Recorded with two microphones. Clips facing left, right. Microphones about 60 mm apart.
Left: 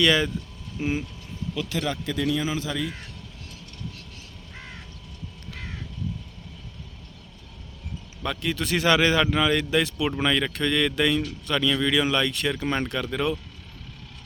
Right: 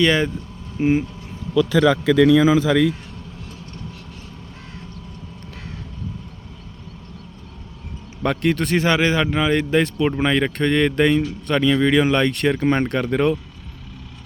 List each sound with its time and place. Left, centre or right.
0.0 s speech: right
2.1 s a man's voice: right
8.2 s speech: right
8.7 s speech: right
12.6 s speech: right